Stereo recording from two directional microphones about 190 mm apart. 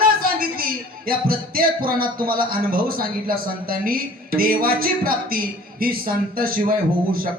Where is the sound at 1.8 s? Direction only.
50° right (ahead or behind).